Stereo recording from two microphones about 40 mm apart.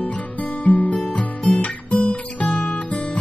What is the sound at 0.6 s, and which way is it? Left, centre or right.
Music, left.